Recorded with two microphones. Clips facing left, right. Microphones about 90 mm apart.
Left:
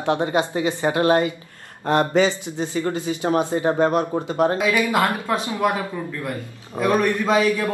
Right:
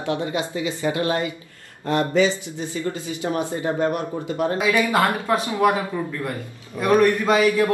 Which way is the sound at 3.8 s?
80° left.